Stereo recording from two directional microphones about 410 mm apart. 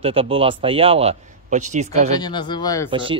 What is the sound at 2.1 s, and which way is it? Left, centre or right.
Speech, centre.